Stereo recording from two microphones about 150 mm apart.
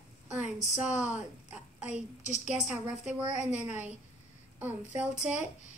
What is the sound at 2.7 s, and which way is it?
Speech, 10° right (ahead or behind).